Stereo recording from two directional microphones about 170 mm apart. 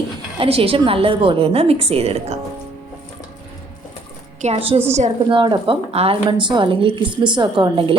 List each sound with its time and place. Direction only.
0.3 s a woman's voice: 35° right (ahead or behind)
4.4 s a woman's voice: 40° right (ahead or behind)
5.4 s a woman's voice: 30° right (ahead or behind)